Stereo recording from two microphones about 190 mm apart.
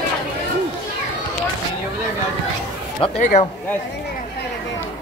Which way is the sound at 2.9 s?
30° left (ahead or behind).